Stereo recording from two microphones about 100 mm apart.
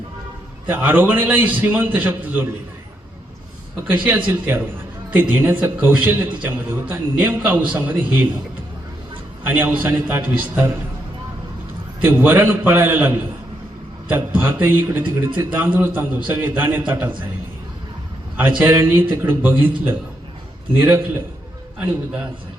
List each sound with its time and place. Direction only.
0.7 s a man's voice: 20° right (ahead or behind)
3.8 s a man's voice: 20° right (ahead or behind)
9.4 s a man's voice: 20° right (ahead or behind)
11.9 s a man's voice: 20° right (ahead or behind)
18.3 s a man's voice: 20° right (ahead or behind)